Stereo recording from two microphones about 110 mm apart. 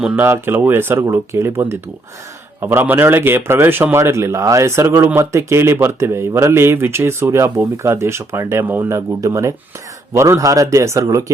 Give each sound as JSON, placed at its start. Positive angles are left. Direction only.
{"t": 0.2, "sound": "a man's voice", "side_deg": -20}